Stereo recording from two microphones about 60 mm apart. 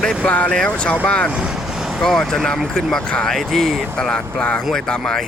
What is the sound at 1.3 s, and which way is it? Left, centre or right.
Vehicle, centre.